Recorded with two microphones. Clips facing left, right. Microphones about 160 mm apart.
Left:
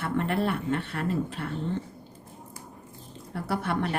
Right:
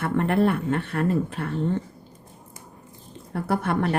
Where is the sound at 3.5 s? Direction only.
50° right (ahead or behind).